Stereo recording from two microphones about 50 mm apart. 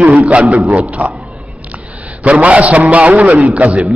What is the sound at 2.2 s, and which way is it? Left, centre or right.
A man's voice, right.